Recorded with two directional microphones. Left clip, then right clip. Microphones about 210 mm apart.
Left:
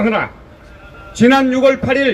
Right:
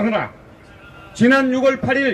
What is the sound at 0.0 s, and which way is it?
A man's voice, 35° left (ahead or behind).